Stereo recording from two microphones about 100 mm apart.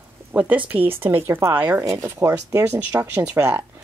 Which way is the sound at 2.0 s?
35° right (ahead or behind).